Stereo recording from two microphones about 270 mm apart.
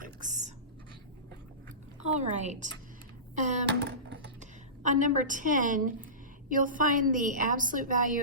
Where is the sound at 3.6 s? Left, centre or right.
Right.